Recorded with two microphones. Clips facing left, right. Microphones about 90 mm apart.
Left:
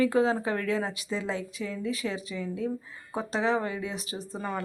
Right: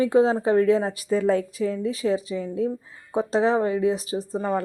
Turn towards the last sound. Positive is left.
turn(degrees=-30)  # may be behind; listen again after turning